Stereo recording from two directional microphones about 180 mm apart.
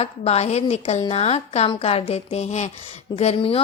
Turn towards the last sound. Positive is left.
turn(degrees=30)  # may be behind; listen again after turning